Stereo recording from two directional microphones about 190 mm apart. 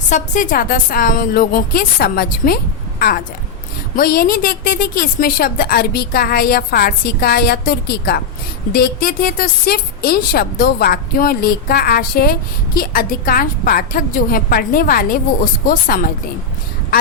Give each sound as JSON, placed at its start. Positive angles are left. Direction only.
{"t": 0.1, "sound": "a woman's voice", "side_deg": 45}
{"t": 3.9, "sound": "a woman's voice", "side_deg": 50}